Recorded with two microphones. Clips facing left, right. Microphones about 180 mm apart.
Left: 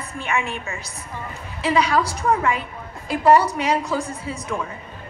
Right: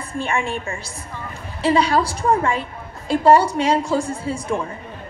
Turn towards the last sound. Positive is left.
turn(degrees=-30)  # may be behind; listen again after turning